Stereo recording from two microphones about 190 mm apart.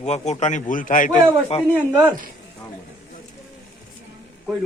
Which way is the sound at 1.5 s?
30° left (ahead or behind).